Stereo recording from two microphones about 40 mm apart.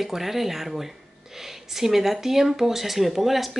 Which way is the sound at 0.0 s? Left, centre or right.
Centre.